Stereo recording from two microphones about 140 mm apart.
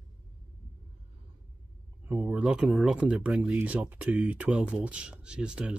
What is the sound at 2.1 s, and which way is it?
Speech, 10° right (ahead or behind).